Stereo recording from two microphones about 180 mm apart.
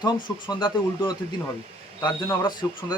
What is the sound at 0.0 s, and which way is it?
Speech, 25° left (ahead or behind).